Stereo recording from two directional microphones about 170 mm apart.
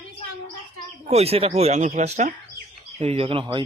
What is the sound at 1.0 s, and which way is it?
Speech, 40° right (ahead or behind).